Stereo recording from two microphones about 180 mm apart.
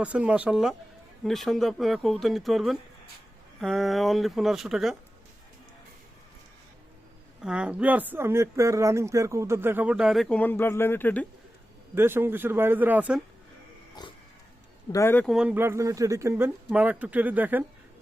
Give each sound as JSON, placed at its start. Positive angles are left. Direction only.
{"t": 0.0, "sound": "speech", "side_deg": -5}
{"t": 7.4, "sound": "speech", "side_deg": -5}
{"t": 11.9, "sound": "speech", "side_deg": -10}
{"t": 14.0, "sound": "pig", "side_deg": 20}
{"t": 14.9, "sound": "speech", "side_deg": 10}
{"t": 15.3, "sound": "speech", "side_deg": -5}